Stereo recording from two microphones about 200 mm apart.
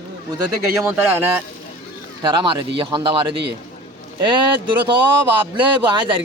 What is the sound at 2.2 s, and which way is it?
Speech, 25° right (ahead or behind).